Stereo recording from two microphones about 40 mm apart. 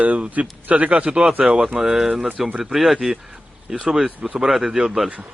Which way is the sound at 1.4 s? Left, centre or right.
Centre.